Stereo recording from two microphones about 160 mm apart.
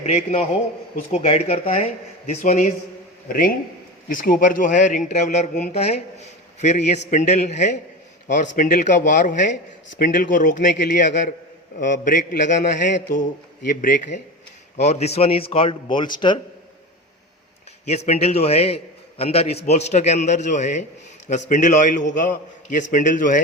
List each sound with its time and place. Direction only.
0.0 s a man's voice: 45° left (ahead or behind)
3.2 s a man's voice: 65° left (ahead or behind)
12.9 s speech: 65° left (ahead or behind)
13.7 s a man's voice: 55° left (ahead or behind); by 16.4 s 30° left (ahead or behind)
17.8 s a man's voice: 45° left (ahead or behind)